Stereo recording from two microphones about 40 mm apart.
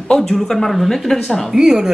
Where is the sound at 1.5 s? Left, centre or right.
Centre.